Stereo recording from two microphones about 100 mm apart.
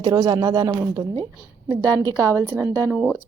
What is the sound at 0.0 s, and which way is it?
Speech, 40° right (ahead or behind).